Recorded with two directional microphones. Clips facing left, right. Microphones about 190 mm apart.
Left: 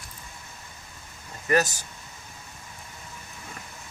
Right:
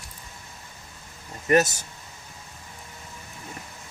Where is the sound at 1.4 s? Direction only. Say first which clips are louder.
Right 3 dB; 25° right (ahead or behind).